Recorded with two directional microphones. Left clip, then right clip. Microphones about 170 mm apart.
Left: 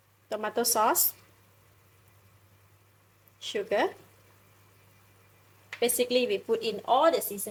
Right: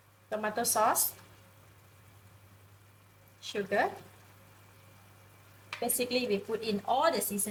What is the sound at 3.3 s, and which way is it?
Speech, 50° left (ahead or behind).